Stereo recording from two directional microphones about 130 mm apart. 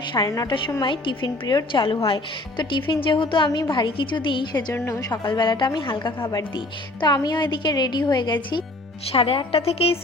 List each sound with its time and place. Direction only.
0.1 s a woman's voice: 30° left (ahead or behind)
4.7 s a woman's voice: 25° left (ahead or behind); by 10.0 s 50° left (ahead or behind)